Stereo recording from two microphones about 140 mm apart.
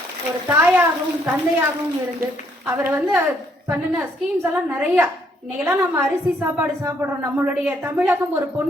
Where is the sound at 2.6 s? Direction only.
15° right (ahead or behind).